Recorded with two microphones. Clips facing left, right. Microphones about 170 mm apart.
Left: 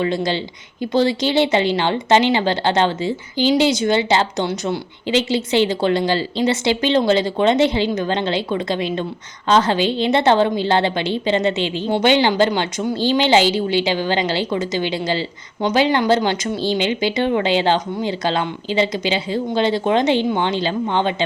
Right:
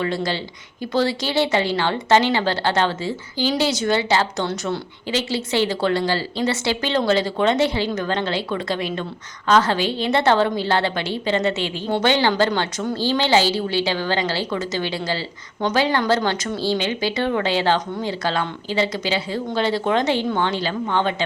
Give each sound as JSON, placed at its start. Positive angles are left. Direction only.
{"t": 0.0, "sound": "speech", "side_deg": 20}